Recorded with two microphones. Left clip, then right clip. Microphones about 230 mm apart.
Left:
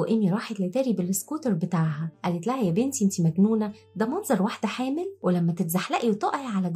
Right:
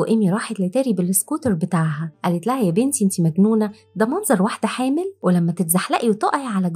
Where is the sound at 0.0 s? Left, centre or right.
Right.